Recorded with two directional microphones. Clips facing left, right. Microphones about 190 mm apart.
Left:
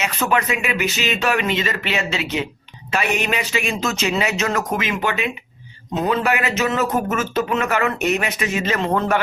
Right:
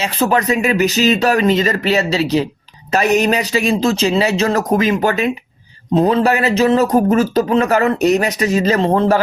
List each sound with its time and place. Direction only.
0.0 s speech: 30° right (ahead or behind)